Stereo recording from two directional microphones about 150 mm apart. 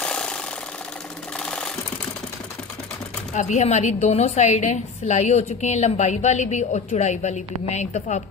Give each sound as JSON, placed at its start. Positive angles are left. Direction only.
{"t": 0.0, "sound": "jackhammer", "side_deg": 5}
{"t": 1.4, "sound": "sewing machine", "side_deg": 5}
{"t": 3.3, "sound": "a woman's voice", "side_deg": 50}